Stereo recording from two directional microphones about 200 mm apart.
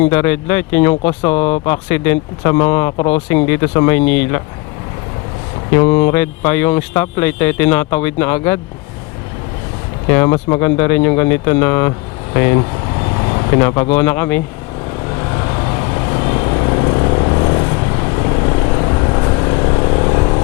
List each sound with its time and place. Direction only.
0.1 s speech: 10° left (ahead or behind)
5.7 s speech: 15° left (ahead or behind)
10.1 s speech: 15° left (ahead or behind)
15.2 s vehicle: 20° left (ahead or behind)